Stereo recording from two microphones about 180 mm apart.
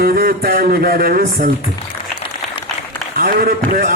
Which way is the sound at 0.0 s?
55° right (ahead or behind).